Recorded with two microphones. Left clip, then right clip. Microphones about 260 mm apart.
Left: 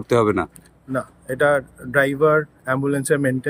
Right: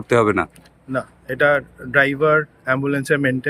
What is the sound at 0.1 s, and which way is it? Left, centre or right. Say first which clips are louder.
Speech: right 2 dB; centre.